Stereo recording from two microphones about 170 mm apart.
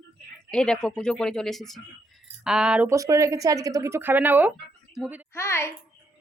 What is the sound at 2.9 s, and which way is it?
Speech, 20° right (ahead or behind).